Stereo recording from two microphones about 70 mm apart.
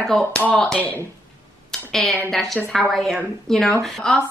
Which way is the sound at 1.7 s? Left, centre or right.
Centre.